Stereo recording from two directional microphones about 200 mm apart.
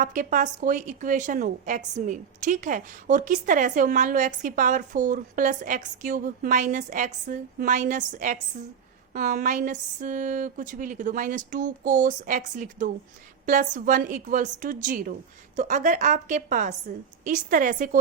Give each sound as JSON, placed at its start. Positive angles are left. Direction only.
{"t": 0.0, "sound": "a woman's voice", "side_deg": -40}